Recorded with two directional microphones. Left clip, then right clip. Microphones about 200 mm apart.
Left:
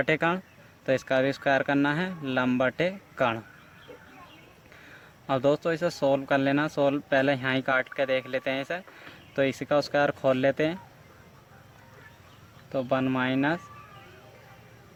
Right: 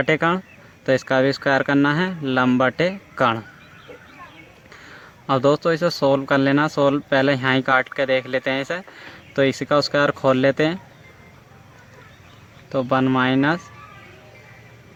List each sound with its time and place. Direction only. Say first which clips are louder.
0.0 s speech: right 6 dB; 15° right (ahead or behind)
5.2 s a man's voice: right 7 dB; 25° right (ahead or behind)
12.7 s speech: right 8 dB; 25° right (ahead or behind)